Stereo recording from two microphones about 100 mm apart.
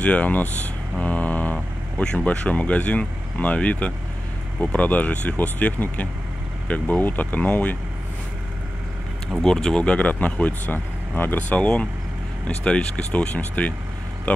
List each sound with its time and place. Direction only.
0.0 s speech: 15° left (ahead or behind)
9.4 s speech: 5° left (ahead or behind)